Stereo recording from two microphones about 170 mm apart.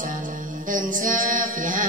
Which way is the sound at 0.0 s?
50° right (ahead or behind).